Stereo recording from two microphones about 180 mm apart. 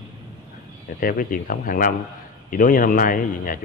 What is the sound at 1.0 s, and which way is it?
A man's voice, 50° left (ahead or behind).